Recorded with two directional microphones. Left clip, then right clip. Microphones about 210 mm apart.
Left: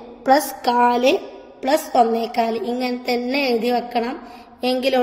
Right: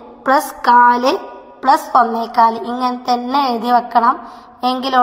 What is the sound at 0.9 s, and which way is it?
Speech, 25° right (ahead or behind).